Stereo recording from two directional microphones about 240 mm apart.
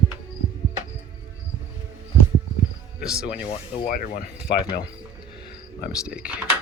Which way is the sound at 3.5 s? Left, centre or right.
Left.